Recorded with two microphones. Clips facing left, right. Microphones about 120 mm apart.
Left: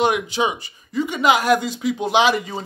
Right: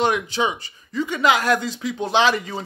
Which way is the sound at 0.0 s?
15° left (ahead or behind).